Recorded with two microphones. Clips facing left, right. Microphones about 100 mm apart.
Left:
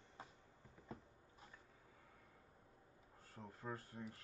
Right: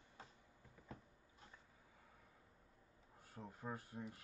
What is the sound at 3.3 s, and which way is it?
Speech, 15° right (ahead or behind).